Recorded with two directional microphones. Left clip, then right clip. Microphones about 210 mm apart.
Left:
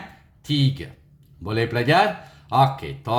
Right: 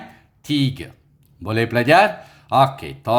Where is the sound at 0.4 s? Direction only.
40° right (ahead or behind).